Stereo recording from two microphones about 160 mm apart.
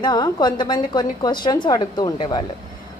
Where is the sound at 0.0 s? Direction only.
25° left (ahead or behind).